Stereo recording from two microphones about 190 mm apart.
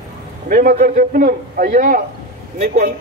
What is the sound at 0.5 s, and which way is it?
Speech, 50° right (ahead or behind).